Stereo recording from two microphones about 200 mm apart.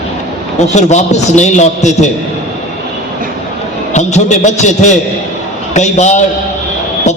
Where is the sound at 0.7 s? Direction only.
35° left (ahead or behind).